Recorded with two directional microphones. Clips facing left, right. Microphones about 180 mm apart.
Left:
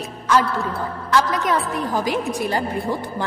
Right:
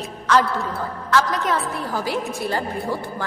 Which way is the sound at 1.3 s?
15° left (ahead or behind).